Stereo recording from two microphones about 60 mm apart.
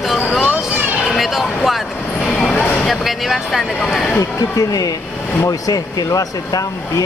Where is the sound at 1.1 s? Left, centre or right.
Centre.